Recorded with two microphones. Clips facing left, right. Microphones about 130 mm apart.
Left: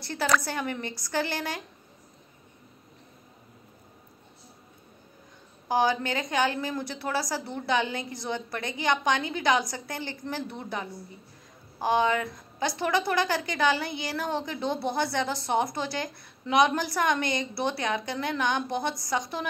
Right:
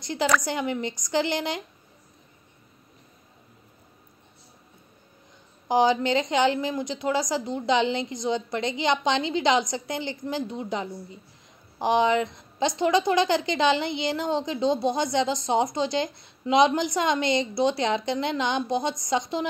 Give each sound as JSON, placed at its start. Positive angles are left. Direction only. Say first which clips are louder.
{"t": 0.0, "sound": "a woman's voice", "louder": "right 2 dB", "side_deg": -15}
{"t": 5.7, "sound": "a woman's voice", "louder": "right 4 dB", "side_deg": -20}